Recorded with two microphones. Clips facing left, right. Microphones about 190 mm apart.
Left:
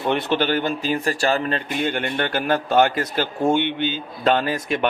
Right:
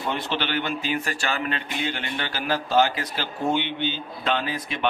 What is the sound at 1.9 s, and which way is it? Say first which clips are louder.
A man's voice: left 7 dB; 55° left (ahead or behind).